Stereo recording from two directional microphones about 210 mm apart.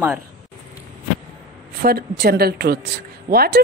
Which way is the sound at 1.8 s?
50° right (ahead or behind).